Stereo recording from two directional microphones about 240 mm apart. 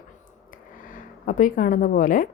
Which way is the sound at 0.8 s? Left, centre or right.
Left.